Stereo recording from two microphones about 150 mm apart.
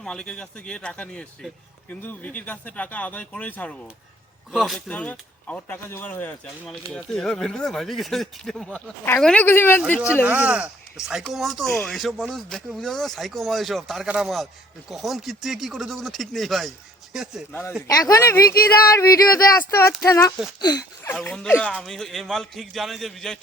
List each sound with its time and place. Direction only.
0.0 s speech: 5° left (ahead or behind)
4.5 s speech: centre (ahead or behind)
10.2 s speech: 10° right (ahead or behind)
11.7 s speech: 10° left (ahead or behind)
17.5 s speech: 15° left (ahead or behind)
17.8 s a sound: 20° left (ahead or behind)
21.3 s speech: 10° left (ahead or behind)